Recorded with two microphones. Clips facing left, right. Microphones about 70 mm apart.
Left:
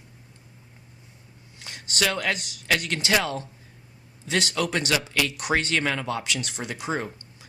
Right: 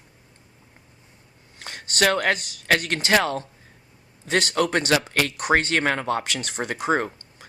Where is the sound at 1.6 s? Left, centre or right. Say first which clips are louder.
Right 5 dB; right.